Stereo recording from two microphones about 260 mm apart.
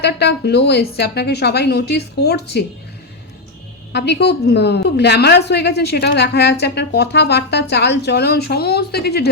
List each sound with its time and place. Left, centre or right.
0.0 s a woman's voice: left
3.9 s a woman's voice: left